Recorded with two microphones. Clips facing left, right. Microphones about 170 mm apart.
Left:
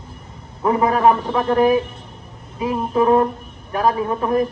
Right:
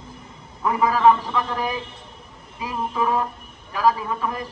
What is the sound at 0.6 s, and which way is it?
Speech, 35° left (ahead or behind).